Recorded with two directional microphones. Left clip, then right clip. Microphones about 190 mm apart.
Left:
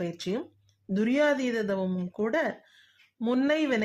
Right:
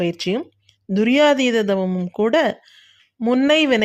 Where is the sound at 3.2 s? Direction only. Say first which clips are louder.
Right 9 dB; 20° right (ahead or behind).